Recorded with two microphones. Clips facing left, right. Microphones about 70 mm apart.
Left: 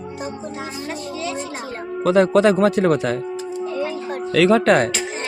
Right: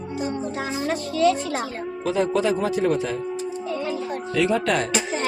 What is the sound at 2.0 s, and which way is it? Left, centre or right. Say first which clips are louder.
Speech: left 7 dB; left.